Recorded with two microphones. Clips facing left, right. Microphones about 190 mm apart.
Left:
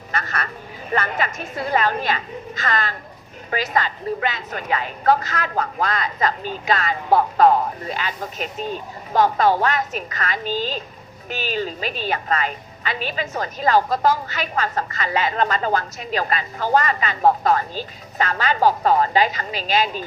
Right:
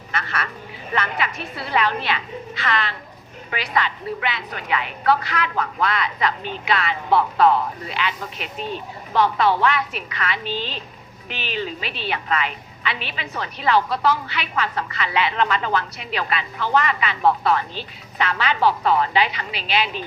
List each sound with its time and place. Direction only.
0.1 s a woman's voice: 40° left (ahead or behind)